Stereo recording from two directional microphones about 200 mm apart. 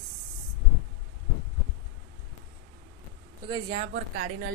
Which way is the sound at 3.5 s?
30° right (ahead or behind).